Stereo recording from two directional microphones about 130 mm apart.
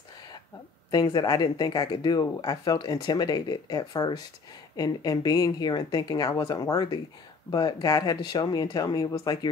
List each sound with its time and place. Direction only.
0.9 s speech: 30° left (ahead or behind)